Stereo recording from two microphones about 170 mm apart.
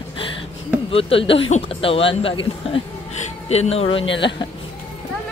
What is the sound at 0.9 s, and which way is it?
Speech, 35° left (ahead or behind).